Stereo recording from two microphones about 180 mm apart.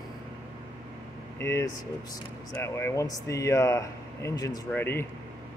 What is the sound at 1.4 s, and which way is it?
Speech, 15° left (ahead or behind).